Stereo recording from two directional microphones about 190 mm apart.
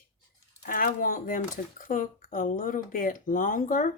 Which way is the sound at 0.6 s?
45° left (ahead or behind).